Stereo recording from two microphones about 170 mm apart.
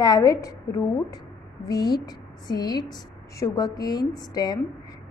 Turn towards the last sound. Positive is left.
turn(degrees=25)  # may be behind; listen again after turning